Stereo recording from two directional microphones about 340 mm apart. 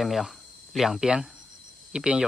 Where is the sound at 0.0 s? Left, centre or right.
Centre.